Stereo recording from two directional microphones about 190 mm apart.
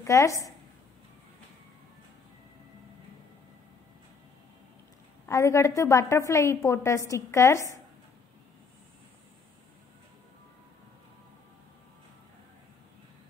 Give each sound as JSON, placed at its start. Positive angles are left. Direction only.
{"t": 0.0, "sound": "a woman's voice", "side_deg": 15}
{"t": 5.3, "sound": "a woman's voice", "side_deg": 15}